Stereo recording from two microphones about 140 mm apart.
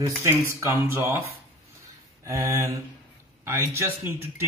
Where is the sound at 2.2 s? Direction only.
25° right (ahead or behind).